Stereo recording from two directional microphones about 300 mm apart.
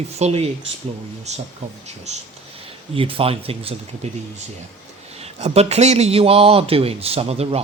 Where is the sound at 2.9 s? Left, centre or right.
Centre.